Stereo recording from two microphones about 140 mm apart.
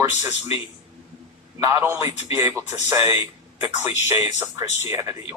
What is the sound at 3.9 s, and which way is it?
Speech, 25° right (ahead or behind).